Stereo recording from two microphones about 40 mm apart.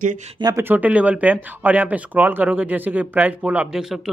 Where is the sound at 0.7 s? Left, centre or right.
Right.